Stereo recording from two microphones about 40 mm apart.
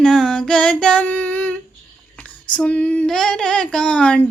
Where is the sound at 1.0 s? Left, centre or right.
Left.